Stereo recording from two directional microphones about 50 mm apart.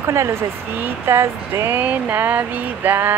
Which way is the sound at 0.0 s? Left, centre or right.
Right.